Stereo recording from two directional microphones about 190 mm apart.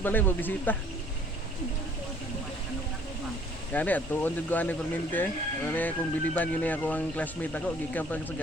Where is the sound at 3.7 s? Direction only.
10° left (ahead or behind).